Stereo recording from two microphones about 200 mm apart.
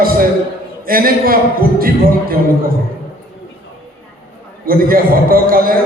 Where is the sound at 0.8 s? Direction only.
45° right (ahead or behind).